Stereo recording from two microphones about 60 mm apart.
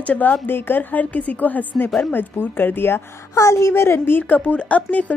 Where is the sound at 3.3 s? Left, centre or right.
Left.